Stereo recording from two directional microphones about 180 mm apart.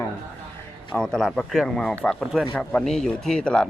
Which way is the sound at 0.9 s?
5° left (ahead or behind).